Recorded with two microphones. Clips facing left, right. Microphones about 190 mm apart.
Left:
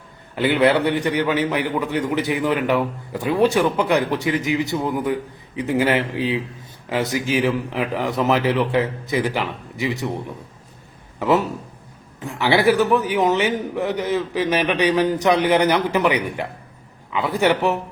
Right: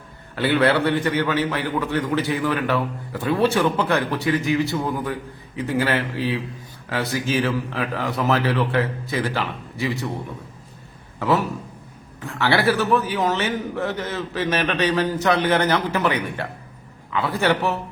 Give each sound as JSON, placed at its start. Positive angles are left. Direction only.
{"t": 0.3, "sound": "a man's voice", "side_deg": 15}
{"t": 11.2, "sound": "a man's voice", "side_deg": 20}